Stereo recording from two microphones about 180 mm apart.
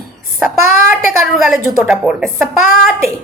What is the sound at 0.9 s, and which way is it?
A woman's voice, 5° right (ahead or behind).